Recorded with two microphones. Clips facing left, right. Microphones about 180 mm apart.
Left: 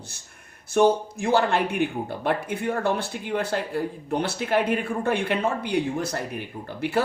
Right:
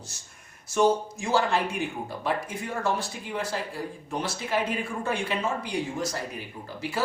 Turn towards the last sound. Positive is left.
turn(degrees=60)  # may be behind; listen again after turning